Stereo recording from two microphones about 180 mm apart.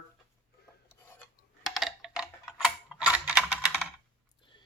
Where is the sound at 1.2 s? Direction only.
Centre (ahead or behind).